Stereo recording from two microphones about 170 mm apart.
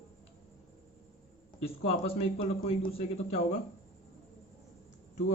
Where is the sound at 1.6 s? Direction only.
35° left (ahead or behind).